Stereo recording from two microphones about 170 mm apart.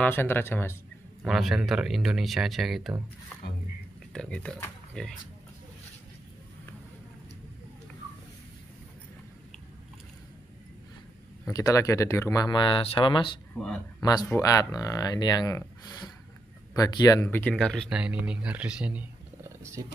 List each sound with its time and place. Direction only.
0.0 s speech: 10° left (ahead or behind)
1.2 s speech: centre (ahead or behind)
4.1 s speech: 5° left (ahead or behind)
11.4 s speech: 20° left (ahead or behind)
13.6 s speech: 5° left (ahead or behind)
14.0 s speech: 20° left (ahead or behind)
16.7 s speech: 20° left (ahead or behind); by 19.0 s 5° right (ahead or behind)
19.6 s speech: 15° right (ahead or behind)